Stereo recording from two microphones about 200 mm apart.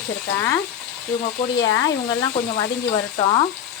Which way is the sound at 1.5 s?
70° left (ahead or behind).